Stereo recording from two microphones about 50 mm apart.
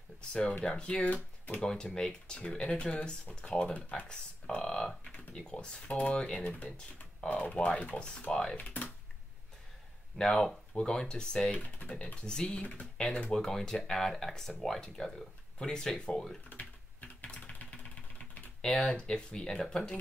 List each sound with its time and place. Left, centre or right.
0.2 s speech: centre
1.6 s speech: centre
8.5 s speech: left
10.1 s speech: centre
11.5 s speech: left
12.3 s speech: centre
16.4 s typing: left
17.3 s vehicle: left
18.6 s speech: centre